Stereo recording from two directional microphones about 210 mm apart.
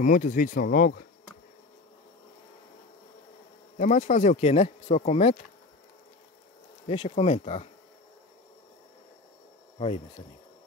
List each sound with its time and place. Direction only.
0.0 s speech: 40° left (ahead or behind)
3.7 s speech: 35° left (ahead or behind)
6.9 s speech: 30° left (ahead or behind)
9.8 s speech: 30° left (ahead or behind)